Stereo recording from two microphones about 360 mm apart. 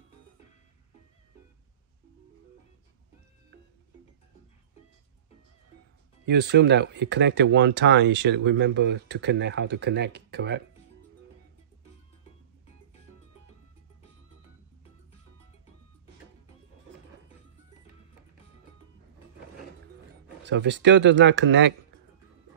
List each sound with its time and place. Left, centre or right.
6.2 s speech: right
20.4 s speech: right